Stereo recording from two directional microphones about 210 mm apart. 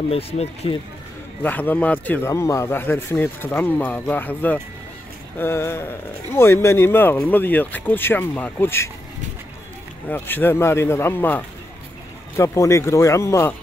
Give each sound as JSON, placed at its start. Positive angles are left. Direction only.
{"t": 0.1, "sound": "speech", "side_deg": 30}
{"t": 1.4, "sound": "speech", "side_deg": 10}
{"t": 10.0, "sound": "speech", "side_deg": 10}